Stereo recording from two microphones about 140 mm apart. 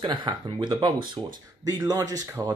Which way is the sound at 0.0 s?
35° right (ahead or behind).